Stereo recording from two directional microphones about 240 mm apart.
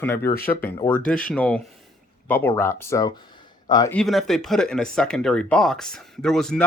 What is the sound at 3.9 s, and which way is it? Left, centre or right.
Speech, centre.